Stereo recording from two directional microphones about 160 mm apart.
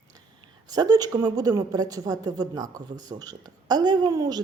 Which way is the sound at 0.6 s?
25° right (ahead or behind).